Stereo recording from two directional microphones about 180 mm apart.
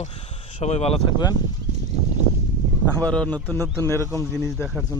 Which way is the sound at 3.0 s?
5° left (ahead or behind).